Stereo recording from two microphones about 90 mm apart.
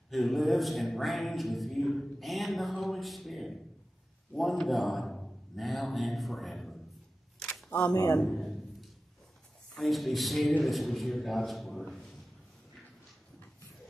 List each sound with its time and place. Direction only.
0.1 s a man's voice: centre (ahead or behind)
7.3 s shuffling cards: 10° left (ahead or behind)
7.9 s a man's voice: 40° left (ahead or behind)
8.2 s a sound: centre (ahead or behind)
9.8 s a man's voice: centre (ahead or behind)